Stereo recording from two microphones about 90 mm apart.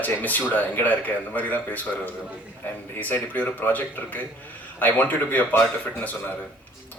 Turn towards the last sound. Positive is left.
turn(degrees=20)  # may be behind; listen again after turning